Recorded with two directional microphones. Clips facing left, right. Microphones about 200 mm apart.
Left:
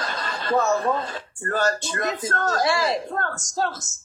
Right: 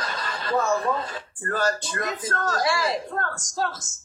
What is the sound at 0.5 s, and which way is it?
Speech, 40° left (ahead or behind).